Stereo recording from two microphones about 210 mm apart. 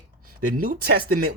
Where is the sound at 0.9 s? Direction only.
45° right (ahead or behind).